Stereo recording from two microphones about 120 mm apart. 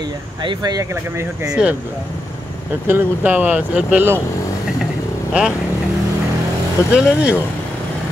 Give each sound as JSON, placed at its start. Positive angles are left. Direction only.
{"t": 0.4, "sound": "speech", "side_deg": -40}
{"t": 1.5, "sound": "speech", "side_deg": -10}
{"t": 2.9, "sound": "speech", "side_deg": -15}
{"t": 5.4, "sound": "speech", "side_deg": -10}
{"t": 6.9, "sound": "speech", "side_deg": -10}